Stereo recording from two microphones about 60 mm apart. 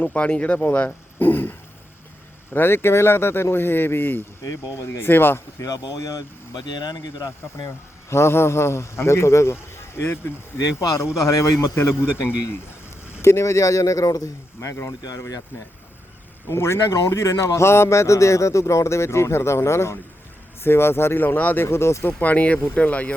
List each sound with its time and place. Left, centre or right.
0.0 s speech: left
1.2 s a sound: left
2.5 s speech: left
4.4 s speech: left
4.9 s speech: left
5.5 s speech: left
8.1 s a man's voice: left
10.7 s a man's voice: left
12.0 s a man's voice: left
13.2 s a man's voice: left
14.6 s a man's voice: left
16.5 s a man's voice: left
22.0 s speech: left